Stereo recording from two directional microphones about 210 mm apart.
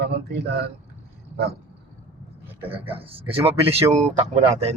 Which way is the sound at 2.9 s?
25° right (ahead or behind).